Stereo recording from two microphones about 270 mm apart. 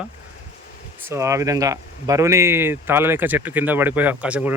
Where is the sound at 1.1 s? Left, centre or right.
Centre.